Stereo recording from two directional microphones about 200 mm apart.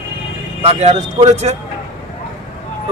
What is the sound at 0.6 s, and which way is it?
Speech, 30° right (ahead or behind).